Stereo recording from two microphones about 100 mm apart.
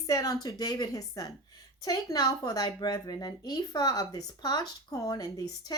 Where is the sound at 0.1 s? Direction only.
40° left (ahead or behind).